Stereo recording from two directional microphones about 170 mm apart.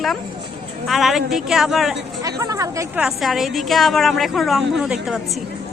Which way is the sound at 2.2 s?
20° right (ahead or behind).